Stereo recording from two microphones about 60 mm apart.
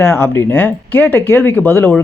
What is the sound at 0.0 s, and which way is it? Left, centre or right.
Speech, left.